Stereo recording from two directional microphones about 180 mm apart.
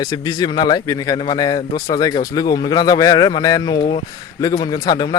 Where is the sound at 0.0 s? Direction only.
20° left (ahead or behind).